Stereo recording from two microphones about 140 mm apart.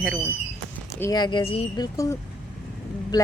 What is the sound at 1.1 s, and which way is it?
Speech, 35° left (ahead or behind).